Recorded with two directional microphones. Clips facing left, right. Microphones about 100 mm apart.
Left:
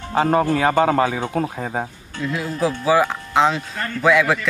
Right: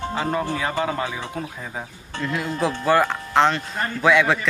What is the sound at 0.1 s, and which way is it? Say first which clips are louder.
Speech: left 10 dB; 50° left (ahead or behind).